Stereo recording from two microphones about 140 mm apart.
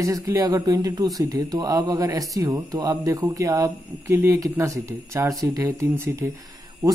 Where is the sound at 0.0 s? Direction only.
20° right (ahead or behind).